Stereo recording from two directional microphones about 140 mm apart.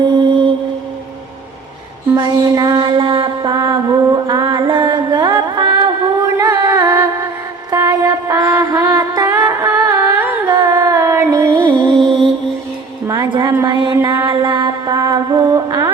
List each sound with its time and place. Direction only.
0.1 s music: 35° right (ahead or behind)
2.1 s mantra: 30° right (ahead or behind)
6.8 s music: 20° right (ahead or behind)
7.7 s mantra: 25° right (ahead or behind)
9.4 s a sound: 25° right (ahead or behind)
10.4 s carnatic music: 25° right (ahead or behind)
13.1 s a sound: 30° right (ahead or behind)